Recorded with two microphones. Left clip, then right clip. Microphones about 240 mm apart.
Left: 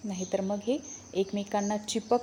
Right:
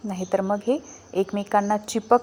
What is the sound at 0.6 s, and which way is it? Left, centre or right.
Speech, right.